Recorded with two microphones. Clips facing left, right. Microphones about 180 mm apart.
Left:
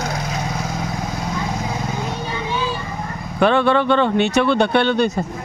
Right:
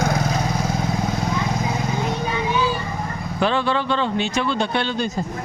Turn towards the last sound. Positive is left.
turn(degrees=65)  # may be behind; listen again after turning